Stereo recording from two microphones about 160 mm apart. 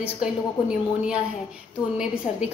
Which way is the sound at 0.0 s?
5° right (ahead or behind).